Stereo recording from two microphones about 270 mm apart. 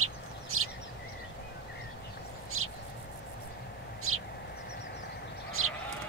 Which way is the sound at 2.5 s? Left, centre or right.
Right.